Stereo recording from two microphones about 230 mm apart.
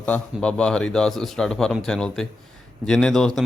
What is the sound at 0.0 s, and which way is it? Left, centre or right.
Speech, centre.